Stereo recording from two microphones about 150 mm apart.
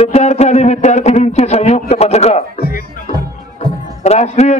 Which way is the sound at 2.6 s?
80° left.